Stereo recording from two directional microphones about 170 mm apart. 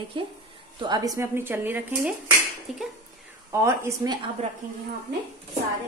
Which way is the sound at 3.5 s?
15° right (ahead or behind).